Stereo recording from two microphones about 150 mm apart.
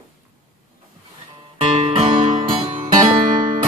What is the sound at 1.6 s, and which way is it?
Music, 40° right (ahead or behind).